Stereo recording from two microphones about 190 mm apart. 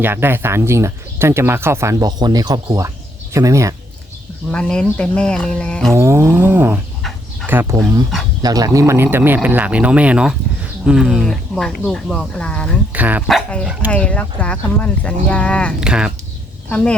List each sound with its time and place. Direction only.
0.0 s speech: 10° right (ahead or behind)
4.5 s speech: 5° left (ahead or behind)
5.9 s speech: 15° right (ahead or behind); by 12.7 s 5° left (ahead or behind)
12.9 s speech: 10° right (ahead or behind)
13.2 s speech: centre (ahead or behind)
15.8 s speech: 5° right (ahead or behind)